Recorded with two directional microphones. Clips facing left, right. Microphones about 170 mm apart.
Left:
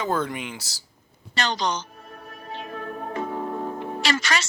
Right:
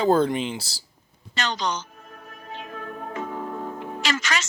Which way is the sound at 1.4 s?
35° left (ahead or behind).